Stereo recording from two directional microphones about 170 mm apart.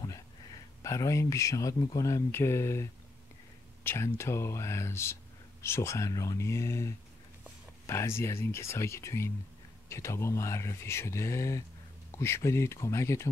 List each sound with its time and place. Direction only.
0.8 s speech: 20° left (ahead or behind)